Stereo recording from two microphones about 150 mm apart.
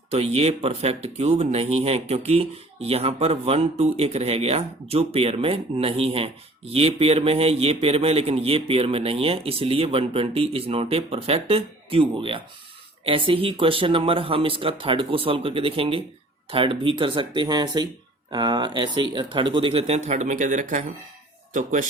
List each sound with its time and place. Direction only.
0.1 s a man's voice: 45° right (ahead or behind); by 21.8 s 60° right (ahead or behind)